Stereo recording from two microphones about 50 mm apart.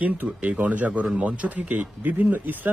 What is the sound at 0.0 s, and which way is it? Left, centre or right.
A man's voice, right.